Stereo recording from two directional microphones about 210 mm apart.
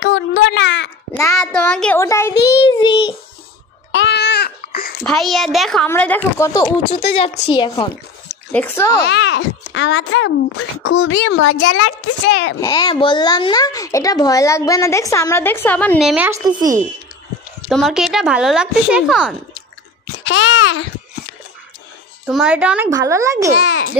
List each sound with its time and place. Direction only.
0.0 s a sound: 60° left (ahead or behind)
1.1 s a child's voice: 15° left (ahead or behind)
1.5 s a child's voice: 5° left (ahead or behind); by 3.2 s 20° left (ahead or behind)
3.9 s babbling: 55° left (ahead or behind)
5.0 s speech: centre (ahead or behind)
7.0 s speech: 30° left (ahead or behind)
8.5 s a child's voice: 10° left (ahead or behind)
9.0 s a child's voice: 55° left (ahead or behind)
12.5 s a child's voice: 20° left (ahead or behind); by 16.3 s centre (ahead or behind)
16.3 s a child's voice: 15° right (ahead or behind)
17.6 s speech: centre (ahead or behind)
20.2 s a child's voice: 70° left (ahead or behind)
22.3 s a child's voice: 5° right (ahead or behind)
23.5 s a child's voice: 90° left